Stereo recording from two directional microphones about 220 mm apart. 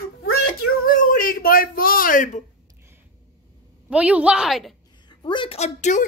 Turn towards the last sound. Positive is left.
turn(degrees=30)  # may be behind; listen again after turning